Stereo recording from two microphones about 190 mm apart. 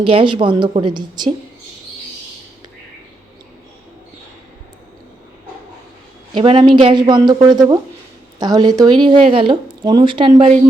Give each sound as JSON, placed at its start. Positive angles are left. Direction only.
{"t": 0.0, "sound": "a woman's voice", "side_deg": -25}
{"t": 6.3, "sound": "a woman's voice", "side_deg": -30}